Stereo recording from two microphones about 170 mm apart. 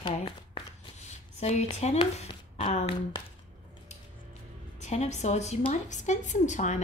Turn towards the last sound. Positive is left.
turn(degrees=45)  # may be behind; listen again after turning